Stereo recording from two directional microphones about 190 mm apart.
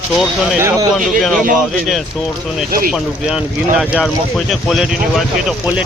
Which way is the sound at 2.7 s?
50° right (ahead or behind).